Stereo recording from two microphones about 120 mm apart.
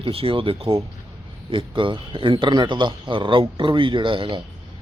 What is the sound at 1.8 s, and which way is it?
Speech, 45° right (ahead or behind).